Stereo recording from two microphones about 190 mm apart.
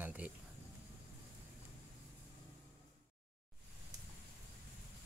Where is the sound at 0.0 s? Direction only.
10° right (ahead or behind).